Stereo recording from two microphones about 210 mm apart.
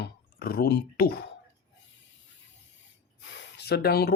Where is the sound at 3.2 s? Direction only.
60° left (ahead or behind).